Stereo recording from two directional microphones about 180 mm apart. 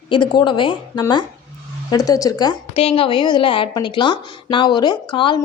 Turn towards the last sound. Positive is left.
turn(degrees=25)  # may be behind; listen again after turning